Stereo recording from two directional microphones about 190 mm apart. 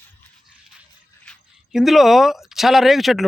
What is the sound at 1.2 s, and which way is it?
Speech, centre (ahead or behind).